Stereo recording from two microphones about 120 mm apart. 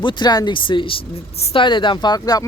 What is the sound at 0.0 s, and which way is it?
Speech, 40° left (ahead or behind).